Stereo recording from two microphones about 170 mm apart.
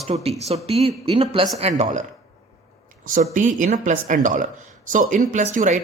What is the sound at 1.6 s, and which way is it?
Speech, 45° right (ahead or behind).